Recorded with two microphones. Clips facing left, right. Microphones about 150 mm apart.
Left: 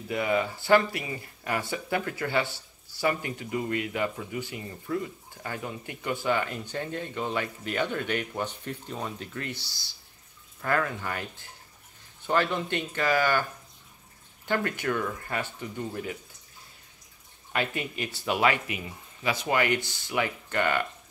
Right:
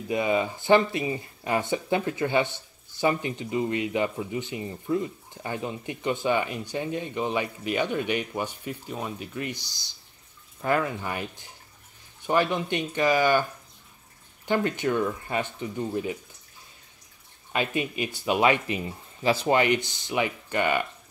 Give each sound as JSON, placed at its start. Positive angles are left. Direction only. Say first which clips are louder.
{"t": 0.1, "sound": "speech", "louder": "right 2 dB", "side_deg": -20}
{"t": 17.5, "sound": "speech", "louder": "right 3 dB", "side_deg": -20}
{"t": 18.8, "sound": "speech", "louder": "right 6 dB", "side_deg": -30}